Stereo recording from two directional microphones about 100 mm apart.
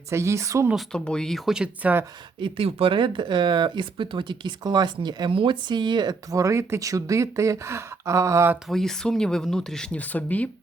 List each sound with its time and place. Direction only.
0.1 s speech: 30° right (ahead or behind)
0.9 s speech: 5° left (ahead or behind)
1.5 s speech: 15° right (ahead or behind)
2.4 s speech: 70° right (ahead or behind); by 8.5 s 30° right (ahead or behind)
8.6 s speech: 5° left (ahead or behind)